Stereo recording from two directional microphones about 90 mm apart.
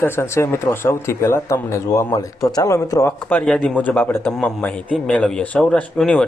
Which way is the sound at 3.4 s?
5° left (ahead or behind).